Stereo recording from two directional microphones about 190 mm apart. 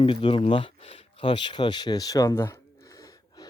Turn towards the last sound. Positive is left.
turn(degrees=20)  # may be behind; listen again after turning